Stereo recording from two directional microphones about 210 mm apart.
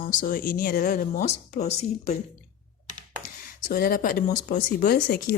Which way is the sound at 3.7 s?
40° left (ahead or behind).